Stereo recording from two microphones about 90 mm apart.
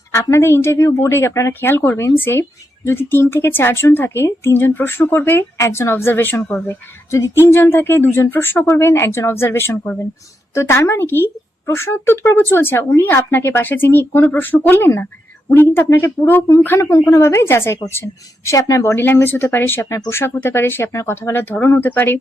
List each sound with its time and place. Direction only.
0.1 s speech: 30° left (ahead or behind)
18.9 s speech: 25° left (ahead or behind)